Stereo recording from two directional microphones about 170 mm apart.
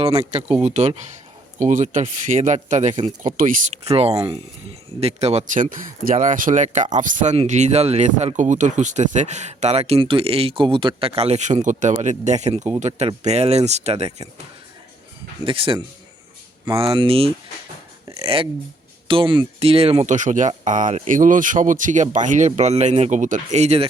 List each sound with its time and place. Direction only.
0.0 s speech: 35° right (ahead or behind)
3.9 s speech: 35° right (ahead or behind)
15.4 s speech: 30° right (ahead or behind)